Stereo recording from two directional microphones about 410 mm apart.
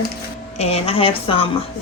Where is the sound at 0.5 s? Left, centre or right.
Centre.